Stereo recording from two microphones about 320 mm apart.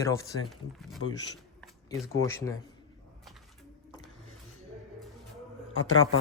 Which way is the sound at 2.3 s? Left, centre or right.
Centre.